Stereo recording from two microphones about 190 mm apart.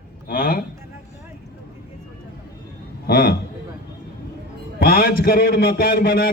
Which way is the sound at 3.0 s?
55° left (ahead or behind).